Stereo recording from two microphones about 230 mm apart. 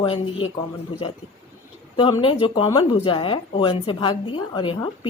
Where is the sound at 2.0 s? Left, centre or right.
Left.